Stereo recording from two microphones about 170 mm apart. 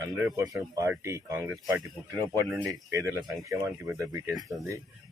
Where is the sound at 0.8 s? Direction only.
15° right (ahead or behind).